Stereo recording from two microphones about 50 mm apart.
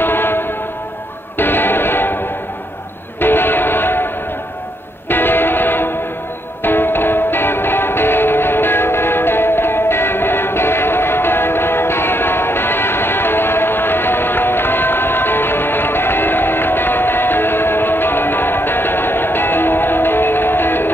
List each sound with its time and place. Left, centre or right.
0.0 s a sound: left
1.4 s music: left
3.2 s music: left
5.1 s music: left